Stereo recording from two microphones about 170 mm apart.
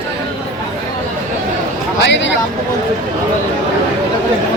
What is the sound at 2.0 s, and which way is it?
Speech, 90° left.